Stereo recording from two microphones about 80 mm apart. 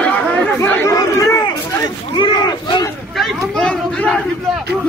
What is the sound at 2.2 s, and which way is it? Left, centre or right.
Speech, left.